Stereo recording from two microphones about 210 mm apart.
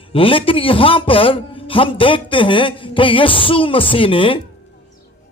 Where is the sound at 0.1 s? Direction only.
25° left (ahead or behind).